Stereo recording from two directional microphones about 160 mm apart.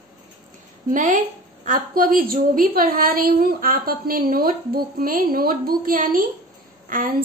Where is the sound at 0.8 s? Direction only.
55° right (ahead or behind).